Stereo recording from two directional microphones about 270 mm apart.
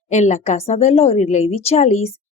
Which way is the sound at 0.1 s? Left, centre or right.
Left.